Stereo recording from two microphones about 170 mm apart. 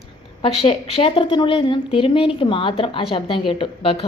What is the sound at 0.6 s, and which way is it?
A woman's voice, 35° left (ahead or behind).